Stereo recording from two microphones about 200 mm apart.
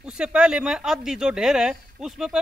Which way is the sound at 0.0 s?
5° right (ahead or behind).